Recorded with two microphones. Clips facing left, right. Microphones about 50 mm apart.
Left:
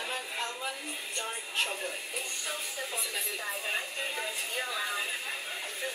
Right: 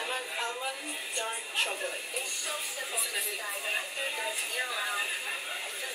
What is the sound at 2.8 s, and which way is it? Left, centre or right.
Speech, centre.